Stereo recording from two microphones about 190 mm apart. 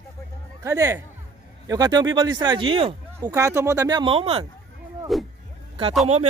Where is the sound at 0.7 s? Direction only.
15° right (ahead or behind).